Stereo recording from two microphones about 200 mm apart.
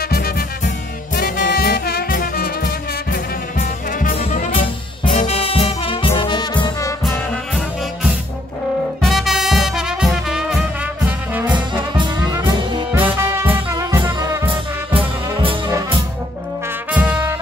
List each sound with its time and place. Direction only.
0.1 s music: 50° left (ahead or behind); by 7.2 s 20° left (ahead or behind)
9.0 s music: centre (ahead or behind)
11.1 s brass instrument: 10° right (ahead or behind)
11.5 s brass instrument: 20° right (ahead or behind)
12.9 s music: 10° right (ahead or behind)
14.9 s brass instrument: 25° right (ahead or behind)
16.9 s music: 5° right (ahead or behind)